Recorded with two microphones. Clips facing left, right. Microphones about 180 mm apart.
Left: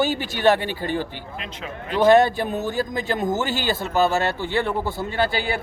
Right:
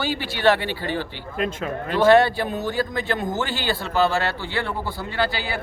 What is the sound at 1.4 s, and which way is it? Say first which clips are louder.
Speech: right 10 dB; 45° right (ahead or behind).